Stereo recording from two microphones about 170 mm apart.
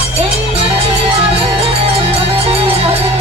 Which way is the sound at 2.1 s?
35° right (ahead or behind).